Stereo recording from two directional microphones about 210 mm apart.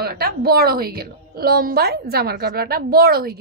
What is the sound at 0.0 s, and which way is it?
A woman's voice, 50° right (ahead or behind).